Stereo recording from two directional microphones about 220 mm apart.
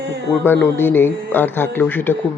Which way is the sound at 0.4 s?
10° left (ahead or behind).